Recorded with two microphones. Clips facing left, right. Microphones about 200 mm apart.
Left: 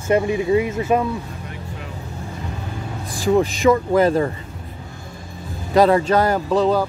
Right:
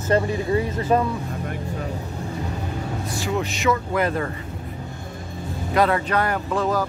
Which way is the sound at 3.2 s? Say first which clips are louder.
Left 8 dB; 35° left (ahead or behind).